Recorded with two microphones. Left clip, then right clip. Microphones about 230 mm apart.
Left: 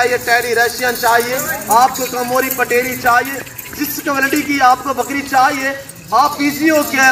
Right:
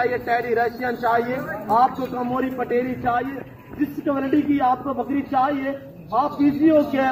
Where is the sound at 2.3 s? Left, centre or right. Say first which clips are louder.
Left 9 dB; centre.